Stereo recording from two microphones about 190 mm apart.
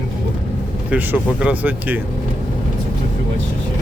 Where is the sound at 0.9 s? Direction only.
10° right (ahead or behind).